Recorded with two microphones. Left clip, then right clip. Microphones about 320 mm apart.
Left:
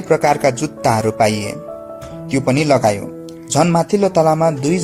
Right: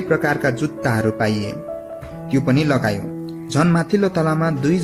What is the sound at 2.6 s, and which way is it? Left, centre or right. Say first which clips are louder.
A man's voice: left 6 dB; left.